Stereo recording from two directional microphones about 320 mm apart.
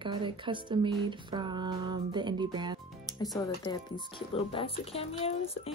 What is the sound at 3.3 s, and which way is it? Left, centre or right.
Speech, centre.